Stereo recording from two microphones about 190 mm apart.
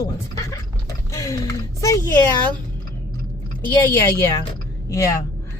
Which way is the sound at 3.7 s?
10° left (ahead or behind).